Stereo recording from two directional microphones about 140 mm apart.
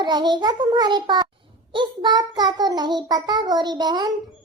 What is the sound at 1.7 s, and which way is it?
Child singing, 35° right (ahead or behind).